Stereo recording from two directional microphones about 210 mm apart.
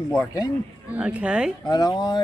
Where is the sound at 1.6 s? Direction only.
15° left (ahead or behind).